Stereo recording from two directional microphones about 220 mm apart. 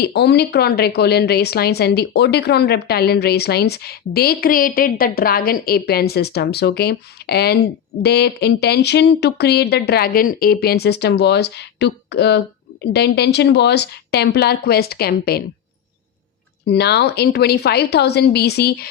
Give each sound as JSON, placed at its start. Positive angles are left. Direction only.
{"t": 0.0, "sound": "a woman's voice", "side_deg": 50}
{"t": 16.6, "sound": "a woman's voice", "side_deg": 50}